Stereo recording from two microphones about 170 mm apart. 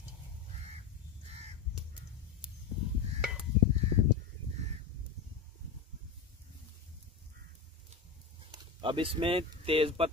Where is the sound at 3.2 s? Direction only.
5° right (ahead or behind).